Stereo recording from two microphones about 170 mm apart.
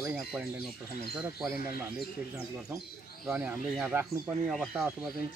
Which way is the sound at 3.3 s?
10° right (ahead or behind).